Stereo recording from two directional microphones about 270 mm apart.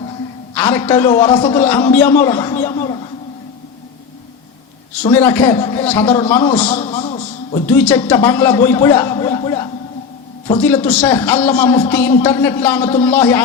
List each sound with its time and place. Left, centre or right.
0.5 s a man's voice: centre
5.1 s a man's voice: centre
6.7 s a sound: left
7.7 s a man's voice: centre